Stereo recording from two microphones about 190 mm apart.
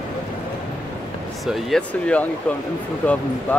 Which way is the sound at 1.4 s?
Centre (ahead or behind).